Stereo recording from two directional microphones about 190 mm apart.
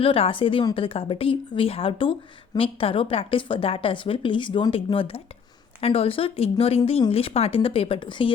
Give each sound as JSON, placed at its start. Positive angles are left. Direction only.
{"t": 0.0, "sound": "a woman's voice", "side_deg": 30}